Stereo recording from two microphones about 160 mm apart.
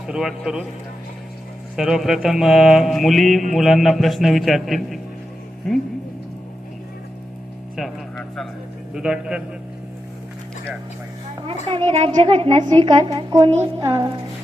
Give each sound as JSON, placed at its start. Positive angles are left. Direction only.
{"t": 0.1, "sound": "mantra", "side_deg": -5}
{"t": 1.7, "sound": "mantra", "side_deg": 0}
{"t": 7.8, "sound": "music", "side_deg": 0}
{"t": 8.9, "sound": "mantra", "side_deg": -5}
{"t": 11.9, "sound": "a woman's voice", "side_deg": -40}